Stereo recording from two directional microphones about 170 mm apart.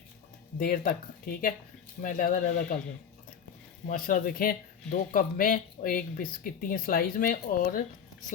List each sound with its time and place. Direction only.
0.6 s speech: 60° left (ahead or behind)
3.8 s speech: 50° left (ahead or behind)